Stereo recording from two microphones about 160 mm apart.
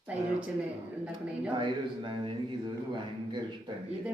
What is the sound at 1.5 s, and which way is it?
A man's voice, 30° right (ahead or behind).